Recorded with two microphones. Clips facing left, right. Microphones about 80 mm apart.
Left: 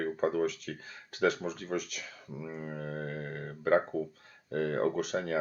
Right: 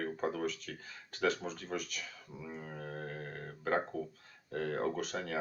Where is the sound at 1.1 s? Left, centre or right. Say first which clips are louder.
Left 4 dB; centre.